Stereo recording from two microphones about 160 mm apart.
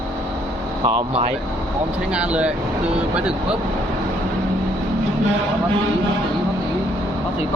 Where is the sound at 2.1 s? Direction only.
5° right (ahead or behind).